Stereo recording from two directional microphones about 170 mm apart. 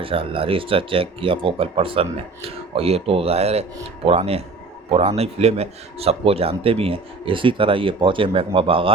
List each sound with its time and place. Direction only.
0.0 s speech: 30° right (ahead or behind)